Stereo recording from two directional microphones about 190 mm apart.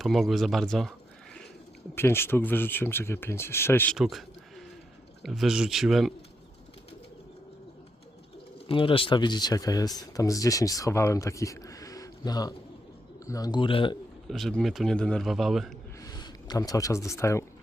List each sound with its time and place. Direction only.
0.0 s speech: centre (ahead or behind)
2.0 s speech: 10° left (ahead or behind)
3.9 s a sound: centre (ahead or behind)
5.2 s a man's voice: centre (ahead or behind)
8.6 s speech: 25° left (ahead or behind)
14.3 s a man's voice: centre (ahead or behind)
16.0 s speech: 20° left (ahead or behind)